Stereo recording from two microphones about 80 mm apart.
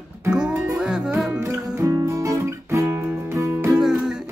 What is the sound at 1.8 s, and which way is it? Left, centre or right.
Music, right.